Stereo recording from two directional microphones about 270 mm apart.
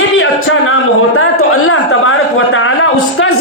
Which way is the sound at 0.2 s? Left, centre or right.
Left.